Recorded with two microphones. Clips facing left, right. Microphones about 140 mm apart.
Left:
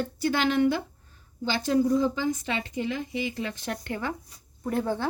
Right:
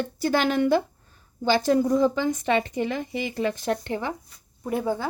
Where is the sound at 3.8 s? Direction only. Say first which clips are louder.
Right 3 dB; 25° right (ahead or behind).